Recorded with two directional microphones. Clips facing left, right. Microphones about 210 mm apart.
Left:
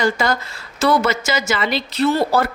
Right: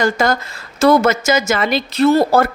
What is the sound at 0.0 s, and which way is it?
A woman's voice, 45° right (ahead or behind).